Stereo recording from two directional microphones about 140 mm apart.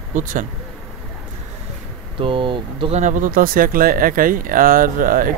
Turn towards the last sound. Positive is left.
turn(degrees=-85)